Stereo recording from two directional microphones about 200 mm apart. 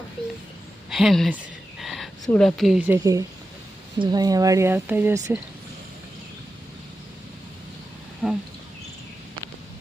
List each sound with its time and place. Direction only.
0.9 s a sound: centre (ahead or behind)
2.4 s speech: centre (ahead or behind)
8.2 s speech: 5° left (ahead or behind)